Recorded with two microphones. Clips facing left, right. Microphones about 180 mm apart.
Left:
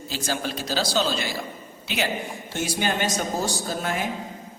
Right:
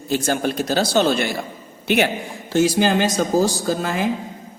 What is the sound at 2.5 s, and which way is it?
A man's voice, 90° right.